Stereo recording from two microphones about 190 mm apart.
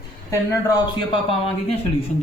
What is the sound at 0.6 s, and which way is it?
Speech, 20° left (ahead or behind).